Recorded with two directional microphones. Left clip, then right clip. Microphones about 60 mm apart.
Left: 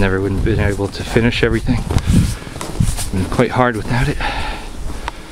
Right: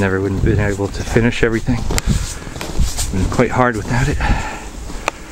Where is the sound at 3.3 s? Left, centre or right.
Centre.